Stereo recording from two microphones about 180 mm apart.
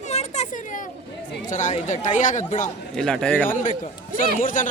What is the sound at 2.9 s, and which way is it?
Speech, 5° left (ahead or behind).